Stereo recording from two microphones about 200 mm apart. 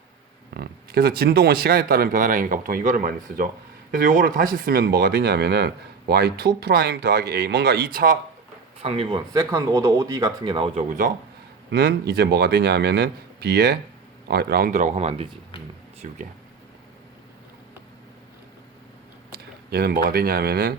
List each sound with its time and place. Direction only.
0.5 s speech: 50° right (ahead or behind)
8.8 s speech: 30° right (ahead or behind)
10.8 s speech: 40° right (ahead or behind)
19.7 s speech: 50° right (ahead or behind)